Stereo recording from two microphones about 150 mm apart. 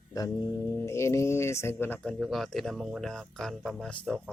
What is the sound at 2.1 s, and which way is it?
Speech, centre (ahead or behind).